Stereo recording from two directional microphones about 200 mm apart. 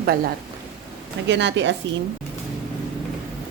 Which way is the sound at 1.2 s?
60° right (ahead or behind).